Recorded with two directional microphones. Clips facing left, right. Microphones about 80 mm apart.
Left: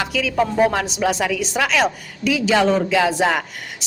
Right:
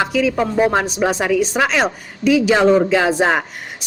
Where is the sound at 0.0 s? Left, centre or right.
Right.